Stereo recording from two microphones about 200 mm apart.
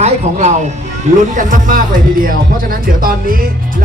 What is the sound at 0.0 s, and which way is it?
Speech, 35° right (ahead or behind).